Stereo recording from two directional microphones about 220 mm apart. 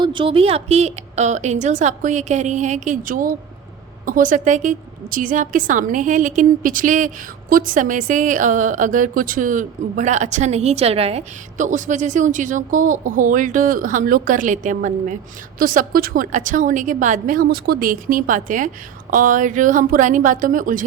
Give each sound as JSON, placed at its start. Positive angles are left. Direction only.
{"t": 0.0, "sound": "a woman's voice", "side_deg": -20}